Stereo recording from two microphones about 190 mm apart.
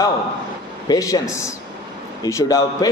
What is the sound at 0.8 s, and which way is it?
Speech, 20° left (ahead or behind).